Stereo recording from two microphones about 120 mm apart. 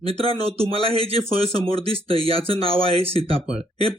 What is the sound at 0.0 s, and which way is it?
Speech, 55° right (ahead or behind).